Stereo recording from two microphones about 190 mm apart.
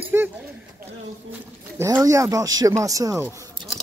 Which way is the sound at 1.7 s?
15° right (ahead or behind).